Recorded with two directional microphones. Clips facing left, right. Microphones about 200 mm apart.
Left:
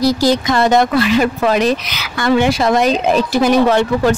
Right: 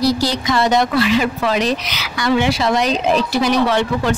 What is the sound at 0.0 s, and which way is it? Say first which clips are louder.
A woman's voice: left 4 dB; 45° left (ahead or behind).